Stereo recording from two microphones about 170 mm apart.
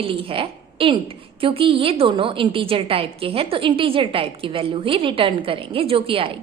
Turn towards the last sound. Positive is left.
turn(degrees=-30)  # may be behind; listen again after turning